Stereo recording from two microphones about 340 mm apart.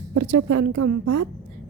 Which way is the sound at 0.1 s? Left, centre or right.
Right.